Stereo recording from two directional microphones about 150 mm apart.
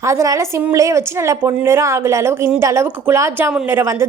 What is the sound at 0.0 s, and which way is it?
A woman's voice, 20° right (ahead or behind).